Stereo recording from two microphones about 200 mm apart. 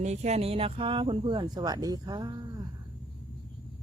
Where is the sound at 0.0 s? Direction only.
35° right (ahead or behind).